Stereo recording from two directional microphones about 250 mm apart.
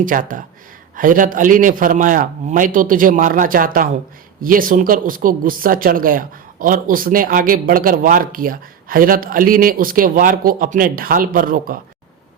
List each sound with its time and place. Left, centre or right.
0.0 s speech: right